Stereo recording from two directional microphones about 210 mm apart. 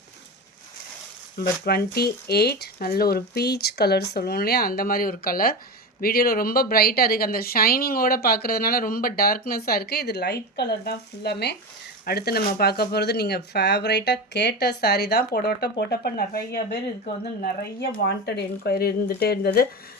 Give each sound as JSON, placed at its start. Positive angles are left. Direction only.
{"t": 1.6, "sound": "speech", "side_deg": 50}